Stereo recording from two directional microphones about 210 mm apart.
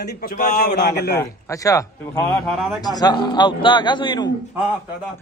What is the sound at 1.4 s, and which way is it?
Speech, 15° left (ahead or behind).